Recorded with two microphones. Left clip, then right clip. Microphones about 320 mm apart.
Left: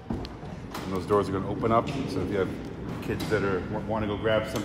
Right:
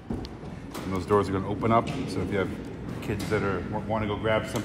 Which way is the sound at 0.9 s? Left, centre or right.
Right.